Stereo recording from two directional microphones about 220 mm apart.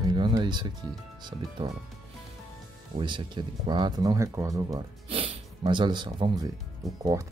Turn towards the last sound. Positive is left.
turn(degrees=0)  # may be behind; listen again after turning